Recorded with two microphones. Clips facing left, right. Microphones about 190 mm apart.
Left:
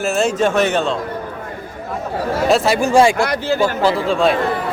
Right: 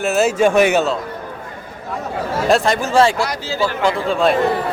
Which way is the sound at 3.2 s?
55° left (ahead or behind).